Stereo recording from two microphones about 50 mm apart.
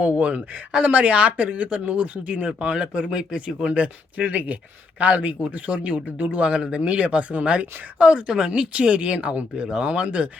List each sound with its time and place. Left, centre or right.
0.0 s speech: right
2.5 s speech: centre